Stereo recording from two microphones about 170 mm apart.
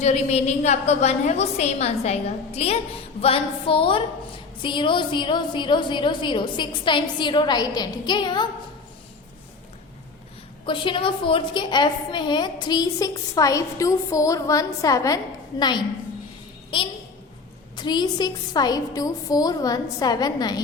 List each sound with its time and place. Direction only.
0.0 s a woman's voice: 40° left (ahead or behind)
10.7 s a woman's voice: 30° left (ahead or behind)